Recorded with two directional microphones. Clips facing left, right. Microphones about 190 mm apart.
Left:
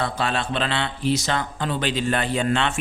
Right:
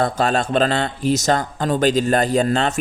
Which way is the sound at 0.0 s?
45° right (ahead or behind).